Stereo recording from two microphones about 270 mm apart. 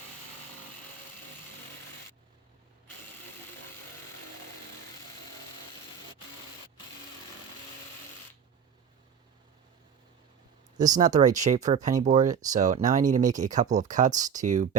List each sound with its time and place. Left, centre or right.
10.8 s speech: right